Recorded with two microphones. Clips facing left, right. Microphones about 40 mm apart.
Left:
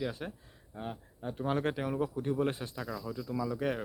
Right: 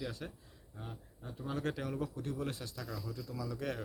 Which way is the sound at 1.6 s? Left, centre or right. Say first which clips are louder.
Left 5 dB; left.